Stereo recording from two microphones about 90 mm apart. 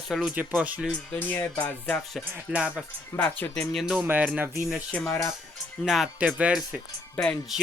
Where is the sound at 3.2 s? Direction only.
20° left (ahead or behind).